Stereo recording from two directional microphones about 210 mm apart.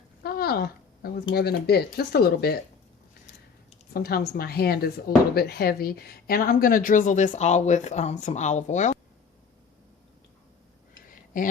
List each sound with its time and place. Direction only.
0.2 s a sound: 45° left (ahead or behind)
1.3 s speech: 50° left (ahead or behind)
3.9 s speech: 50° left (ahead or behind)
11.3 s speech: 40° left (ahead or behind)